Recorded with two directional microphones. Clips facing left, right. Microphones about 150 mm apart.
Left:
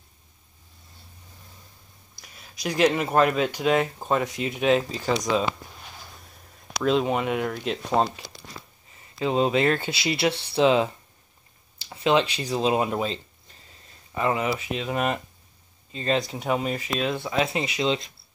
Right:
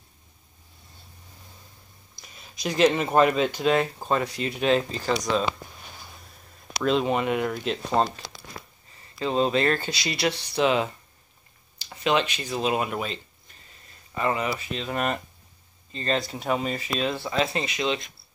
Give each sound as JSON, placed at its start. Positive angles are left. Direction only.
{"t": 2.2, "sound": "a sound", "side_deg": 5}
{"t": 3.1, "sound": "speech", "side_deg": -5}
{"t": 3.3, "sound": "speech", "side_deg": 5}
{"t": 4.6, "sound": "speech", "side_deg": 5}
{"t": 6.7, "sound": "speech", "side_deg": 0}
{"t": 9.2, "sound": "speech", "side_deg": 10}
{"t": 10.3, "sound": "speech", "side_deg": 30}
{"t": 12.0, "sound": "speech", "side_deg": 20}
{"t": 14.1, "sound": "speech", "side_deg": 15}
{"t": 16.4, "sound": "speech", "side_deg": 5}